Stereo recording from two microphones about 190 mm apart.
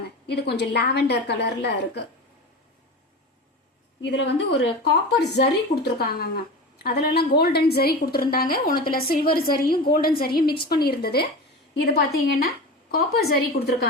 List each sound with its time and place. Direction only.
0.3 s a woman's voice: 60° left (ahead or behind)
4.0 s a woman's voice: 65° left (ahead or behind)